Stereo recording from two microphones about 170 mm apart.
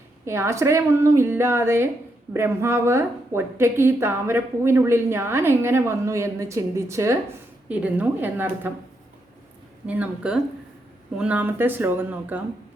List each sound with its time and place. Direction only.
0.3 s a woman's voice: 15° right (ahead or behind)
9.8 s a woman's voice: 10° right (ahead or behind)